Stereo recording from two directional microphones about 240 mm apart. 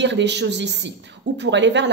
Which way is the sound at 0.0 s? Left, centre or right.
Right.